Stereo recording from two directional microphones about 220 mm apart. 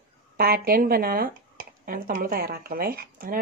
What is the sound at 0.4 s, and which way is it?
Speech, 45° right (ahead or behind).